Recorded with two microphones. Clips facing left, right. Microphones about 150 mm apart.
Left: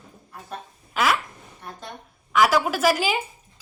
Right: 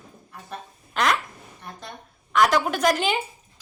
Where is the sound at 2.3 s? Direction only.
5° left (ahead or behind).